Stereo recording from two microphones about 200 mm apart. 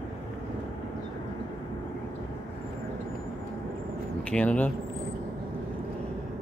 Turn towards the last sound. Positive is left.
turn(degrees=5)  # may be behind; listen again after turning